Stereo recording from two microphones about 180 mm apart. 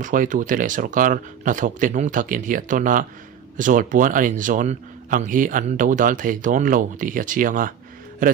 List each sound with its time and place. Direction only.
0.0 s a man's voice: 45° right (ahead or behind)